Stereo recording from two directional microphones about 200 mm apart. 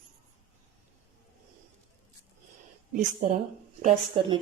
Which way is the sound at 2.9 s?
40° right (ahead or behind).